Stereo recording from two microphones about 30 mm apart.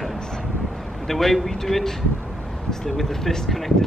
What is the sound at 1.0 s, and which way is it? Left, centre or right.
Speech, centre.